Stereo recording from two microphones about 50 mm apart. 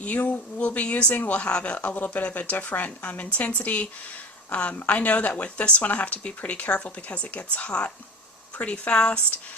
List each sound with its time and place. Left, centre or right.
0.0 s speech: left